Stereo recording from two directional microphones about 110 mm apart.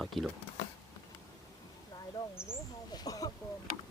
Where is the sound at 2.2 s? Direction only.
30° left (ahead or behind).